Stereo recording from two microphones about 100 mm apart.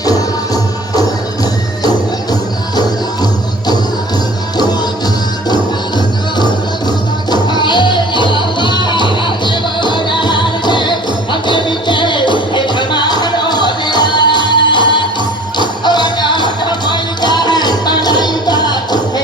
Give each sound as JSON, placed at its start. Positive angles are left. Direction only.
{"t": 0.0, "sound": "music", "side_deg": 40}
{"t": 2.3, "sound": "music", "side_deg": 40}
{"t": 6.3, "sound": "music", "side_deg": 45}